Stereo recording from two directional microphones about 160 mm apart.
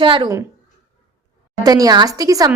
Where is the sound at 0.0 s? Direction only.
30° right (ahead or behind).